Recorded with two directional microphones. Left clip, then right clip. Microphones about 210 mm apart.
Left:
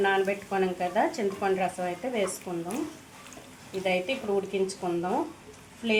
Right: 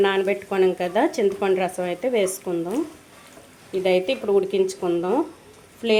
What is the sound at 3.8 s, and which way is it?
Speech, 45° right (ahead or behind).